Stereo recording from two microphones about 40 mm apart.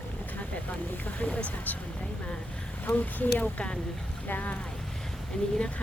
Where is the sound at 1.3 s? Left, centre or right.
Left.